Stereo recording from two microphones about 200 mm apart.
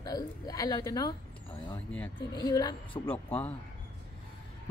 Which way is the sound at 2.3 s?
20° left (ahead or behind).